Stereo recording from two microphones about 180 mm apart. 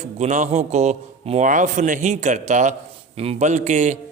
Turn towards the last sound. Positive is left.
turn(degrees=-40)  # may be behind; listen again after turning